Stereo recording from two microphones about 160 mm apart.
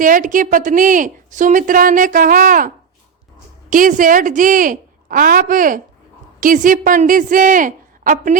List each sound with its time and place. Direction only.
0.0 s a woman's voice: 55° right (ahead or behind)